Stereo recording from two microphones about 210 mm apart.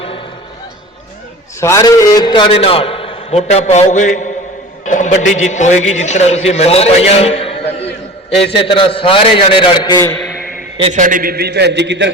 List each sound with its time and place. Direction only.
1.6 s a man's voice: 15° left (ahead or behind)
10.8 s a man's voice: 30° right (ahead or behind); by 12.1 s 55° right (ahead or behind)